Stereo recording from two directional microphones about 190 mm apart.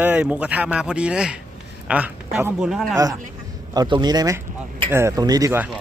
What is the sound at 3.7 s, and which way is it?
Speech, 20° right (ahead or behind).